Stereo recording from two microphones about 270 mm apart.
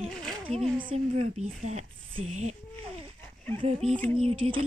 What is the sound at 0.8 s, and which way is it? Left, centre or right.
A woman's voice, right.